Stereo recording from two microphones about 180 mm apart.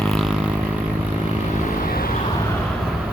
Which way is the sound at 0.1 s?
Centre (ahead or behind).